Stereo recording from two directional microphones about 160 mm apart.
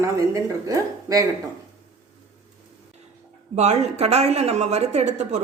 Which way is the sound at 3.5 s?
45° right (ahead or behind).